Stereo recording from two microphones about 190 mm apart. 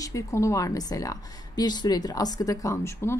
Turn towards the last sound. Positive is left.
turn(degrees=15)  # may be behind; listen again after turning